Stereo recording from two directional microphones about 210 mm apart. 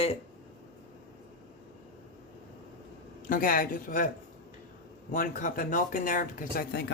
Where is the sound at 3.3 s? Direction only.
40° left (ahead or behind).